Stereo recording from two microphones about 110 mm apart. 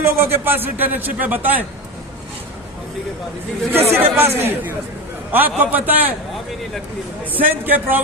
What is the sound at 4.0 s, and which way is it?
Speech, 20° right (ahead or behind).